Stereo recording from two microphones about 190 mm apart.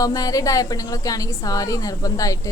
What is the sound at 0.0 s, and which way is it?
Speech, 20° left (ahead or behind).